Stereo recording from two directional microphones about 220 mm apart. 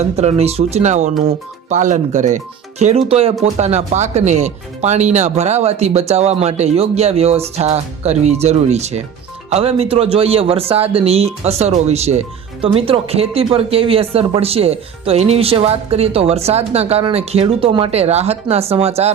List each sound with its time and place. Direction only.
0.0 s speech: 30° right (ahead or behind)